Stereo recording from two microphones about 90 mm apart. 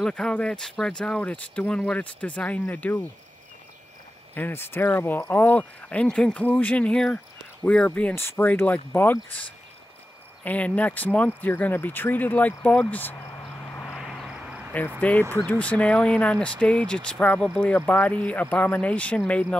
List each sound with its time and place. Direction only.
0.0 s speech: 10° left (ahead or behind)
4.4 s speech: 25° left (ahead or behind)
13.9 s vehicle: centre (ahead or behind)
15.0 s speech: 15° left (ahead or behind)